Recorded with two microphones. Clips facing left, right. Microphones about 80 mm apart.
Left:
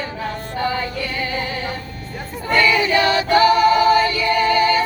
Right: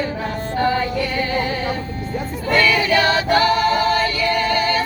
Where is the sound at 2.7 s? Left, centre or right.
Left.